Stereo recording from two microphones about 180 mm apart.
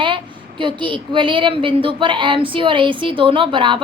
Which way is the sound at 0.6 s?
25° right (ahead or behind).